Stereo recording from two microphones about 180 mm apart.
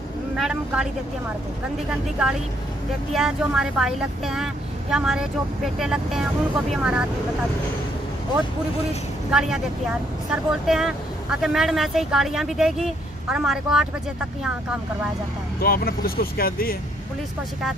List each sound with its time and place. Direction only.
0.4 s vehicle: 5° right (ahead or behind)
3.1 s speech: 5° right (ahead or behind)
9.3 s speech: 5° right (ahead or behind)
15.6 s speech: 55° left (ahead or behind)